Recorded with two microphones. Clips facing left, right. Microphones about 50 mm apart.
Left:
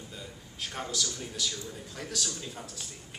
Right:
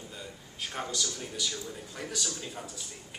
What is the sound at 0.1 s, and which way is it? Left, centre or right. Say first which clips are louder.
A man's voice: even; centre.